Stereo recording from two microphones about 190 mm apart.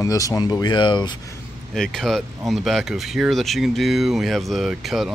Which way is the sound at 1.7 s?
5° left (ahead or behind).